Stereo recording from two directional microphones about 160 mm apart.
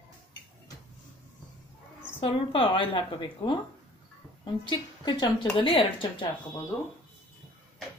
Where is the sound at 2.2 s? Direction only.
35° left (ahead or behind).